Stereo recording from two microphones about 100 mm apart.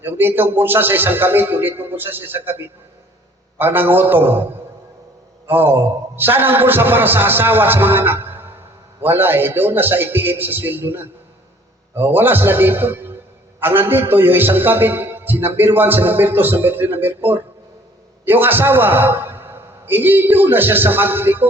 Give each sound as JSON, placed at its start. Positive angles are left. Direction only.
{"t": 0.0, "sound": "a man's voice", "side_deg": -20}
{"t": 5.5, "sound": "a man's voice", "side_deg": -20}